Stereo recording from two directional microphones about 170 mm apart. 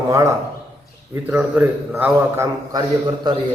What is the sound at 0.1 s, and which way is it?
A man's voice, 15° right (ahead or behind).